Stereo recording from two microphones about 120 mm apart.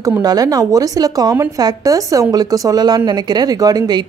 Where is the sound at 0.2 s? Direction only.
30° right (ahead or behind).